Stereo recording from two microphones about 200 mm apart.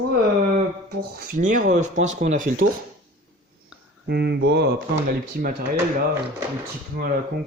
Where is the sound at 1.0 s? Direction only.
45° right (ahead or behind).